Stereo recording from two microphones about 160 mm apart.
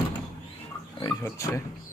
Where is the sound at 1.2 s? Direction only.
20° left (ahead or behind).